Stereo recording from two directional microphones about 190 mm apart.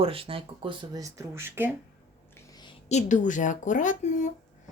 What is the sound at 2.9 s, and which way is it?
A woman's voice, 40° left (ahead or behind).